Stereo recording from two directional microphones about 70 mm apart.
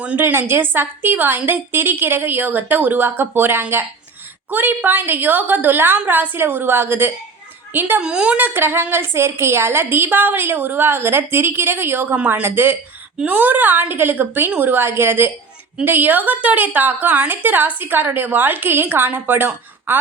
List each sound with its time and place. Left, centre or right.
0.2 s a woman's voice: right
8.0 s a woman's voice: centre
8.4 s a woman's voice: right